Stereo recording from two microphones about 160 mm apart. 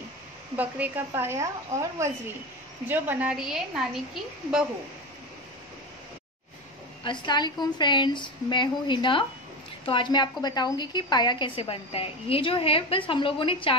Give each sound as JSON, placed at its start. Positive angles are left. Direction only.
{"t": 0.6, "sound": "a woman's voice", "side_deg": -10}
{"t": 7.1, "sound": "a woman's voice", "side_deg": 25}